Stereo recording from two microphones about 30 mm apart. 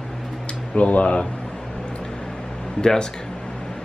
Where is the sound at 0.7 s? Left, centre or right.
Left.